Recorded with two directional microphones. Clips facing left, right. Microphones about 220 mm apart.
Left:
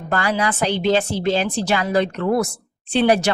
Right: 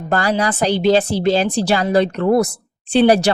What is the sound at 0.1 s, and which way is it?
Speech, 35° right (ahead or behind).